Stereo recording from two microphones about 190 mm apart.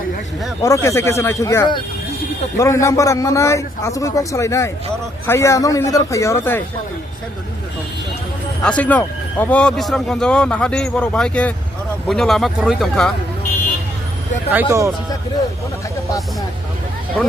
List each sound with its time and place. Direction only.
0.6 s a man's voice: 15° left (ahead or behind)
8.6 s a man's voice: 5° left (ahead or behind)
14.7 s speech: 15° right (ahead or behind)